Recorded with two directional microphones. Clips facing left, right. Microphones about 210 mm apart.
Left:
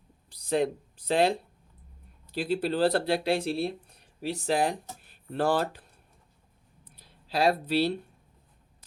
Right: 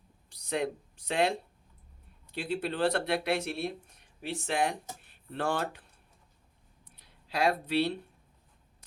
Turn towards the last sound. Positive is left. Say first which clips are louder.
# left 3 dB
turn(degrees=35)  # may be behind; listen again after turning